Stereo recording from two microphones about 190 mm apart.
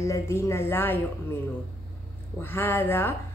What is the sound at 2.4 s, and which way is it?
Speech, 10° left (ahead or behind).